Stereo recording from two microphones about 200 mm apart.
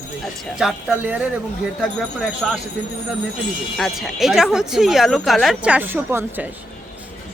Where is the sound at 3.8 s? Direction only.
Centre (ahead or behind).